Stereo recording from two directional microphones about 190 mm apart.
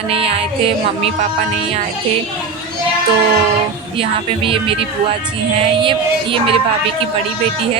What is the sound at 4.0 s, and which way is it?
Child singing, 30° right (ahead or behind).